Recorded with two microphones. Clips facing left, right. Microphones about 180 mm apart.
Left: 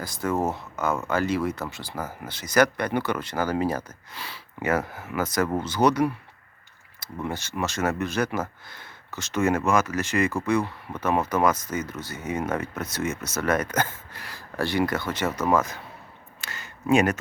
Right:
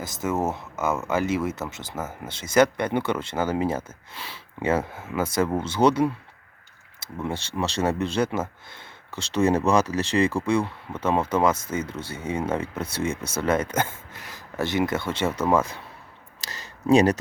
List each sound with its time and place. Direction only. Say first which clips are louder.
0.3 s speech: even; 5° right (ahead or behind)
1.1 s speech: even; 20° right (ahead or behind)
16.4 s a sound: right 2 dB; 35° right (ahead or behind)